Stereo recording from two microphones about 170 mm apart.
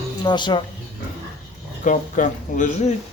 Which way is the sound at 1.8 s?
50° left (ahead or behind).